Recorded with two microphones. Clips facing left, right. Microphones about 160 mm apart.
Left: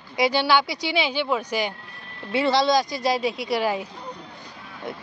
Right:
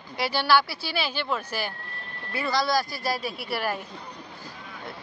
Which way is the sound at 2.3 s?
25° left (ahead or behind).